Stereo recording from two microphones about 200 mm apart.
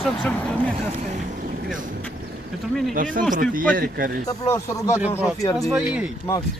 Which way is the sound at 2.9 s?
45° right (ahead or behind).